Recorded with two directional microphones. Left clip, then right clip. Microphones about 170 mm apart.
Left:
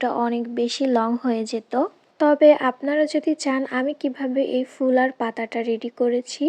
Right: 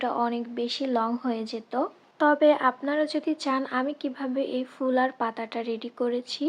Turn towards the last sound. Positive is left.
turn(degrees=35)  # may be behind; listen again after turning